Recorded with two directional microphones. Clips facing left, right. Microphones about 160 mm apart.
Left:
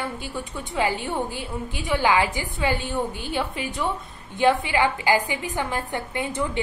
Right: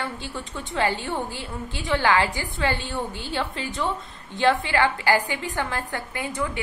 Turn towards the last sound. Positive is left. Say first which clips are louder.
# left 2 dB
turn(degrees=20)  # may be behind; listen again after turning